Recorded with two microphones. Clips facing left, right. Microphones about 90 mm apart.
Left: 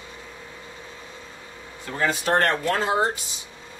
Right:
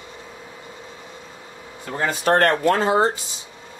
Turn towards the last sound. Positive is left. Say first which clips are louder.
# right 5 dB
turn(degrees=-40)  # may be behind; listen again after turning